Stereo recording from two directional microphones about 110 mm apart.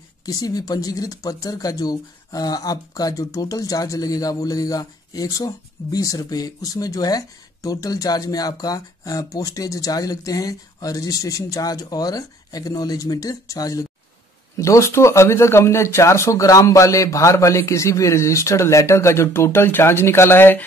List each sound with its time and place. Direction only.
0.2 s speech: 35° left (ahead or behind); by 20.6 s 20° left (ahead or behind)